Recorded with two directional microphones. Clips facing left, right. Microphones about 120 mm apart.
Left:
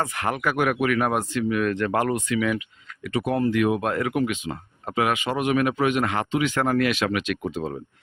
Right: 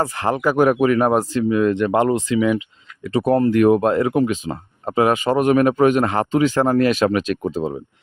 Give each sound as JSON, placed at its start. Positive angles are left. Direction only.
{"t": 0.0, "sound": "speech", "side_deg": -30}
{"t": 3.8, "sound": "speech", "side_deg": -30}